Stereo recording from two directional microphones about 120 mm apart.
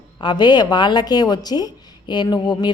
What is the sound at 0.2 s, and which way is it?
A woman's voice, 35° left (ahead or behind).